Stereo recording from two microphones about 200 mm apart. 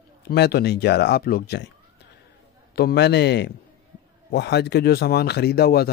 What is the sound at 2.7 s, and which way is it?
A man's voice, 55° left (ahead or behind).